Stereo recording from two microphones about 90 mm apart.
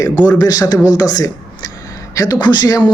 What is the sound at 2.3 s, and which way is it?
Speech, 55° left (ahead or behind).